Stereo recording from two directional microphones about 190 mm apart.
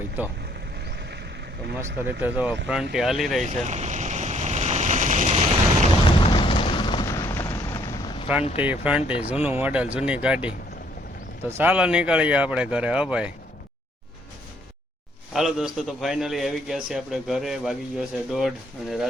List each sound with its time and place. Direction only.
0.2 s speech: 10° right (ahead or behind)
2.2 s a man's voice: 10° right (ahead or behind)
3.4 s boat: 40° right (ahead or behind)
6.1 s boom: 25° left (ahead or behind)
8.6 s speech: 10° right (ahead or behind)
15.3 s a man's voice: centre (ahead or behind)